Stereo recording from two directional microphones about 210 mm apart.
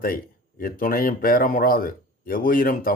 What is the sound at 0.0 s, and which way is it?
Speech, 45° left (ahead or behind).